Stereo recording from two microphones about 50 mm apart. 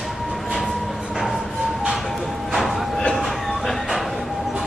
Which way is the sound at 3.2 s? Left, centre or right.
Centre.